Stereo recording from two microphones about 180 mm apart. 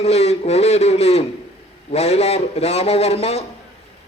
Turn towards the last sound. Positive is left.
turn(degrees=35)  # may be behind; listen again after turning